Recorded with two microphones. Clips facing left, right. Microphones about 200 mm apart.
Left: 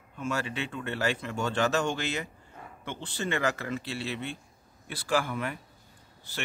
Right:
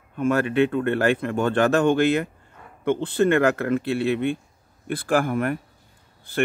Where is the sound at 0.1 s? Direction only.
55° right (ahead or behind).